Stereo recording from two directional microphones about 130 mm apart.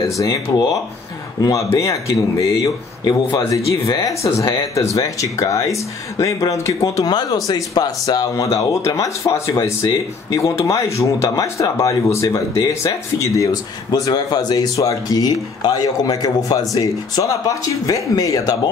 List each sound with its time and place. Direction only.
0.2 s speech: 30° left (ahead or behind)